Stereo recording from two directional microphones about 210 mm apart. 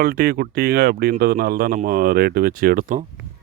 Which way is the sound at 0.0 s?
45° right (ahead or behind).